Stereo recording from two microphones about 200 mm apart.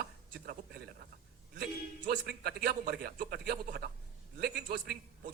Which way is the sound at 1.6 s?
45° right (ahead or behind).